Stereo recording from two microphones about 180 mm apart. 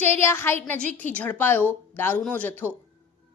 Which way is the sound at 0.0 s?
15° left (ahead or behind).